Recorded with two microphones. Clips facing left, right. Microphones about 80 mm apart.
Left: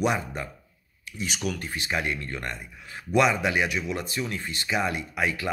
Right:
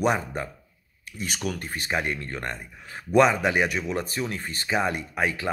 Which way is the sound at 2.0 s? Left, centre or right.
Right.